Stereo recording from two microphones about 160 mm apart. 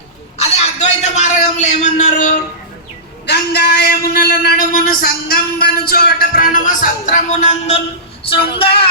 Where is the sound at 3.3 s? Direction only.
90° left; by 7.8 s 45° left (ahead or behind).